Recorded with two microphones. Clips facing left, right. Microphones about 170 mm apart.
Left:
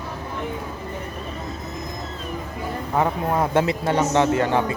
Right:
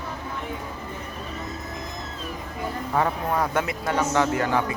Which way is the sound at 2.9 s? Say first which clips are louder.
Left 3 dB; 20° left (ahead or behind).